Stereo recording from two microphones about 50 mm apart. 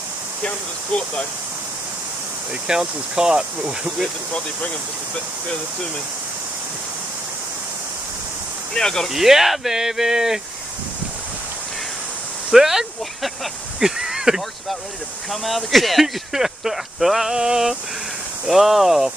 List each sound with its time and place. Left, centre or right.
0.4 s speech: left
2.6 s speech: centre
5.1 s speech: centre
8.7 s speech: centre
9.1 s speech: centre
12.4 s a sound: centre
15.2 s speech: centre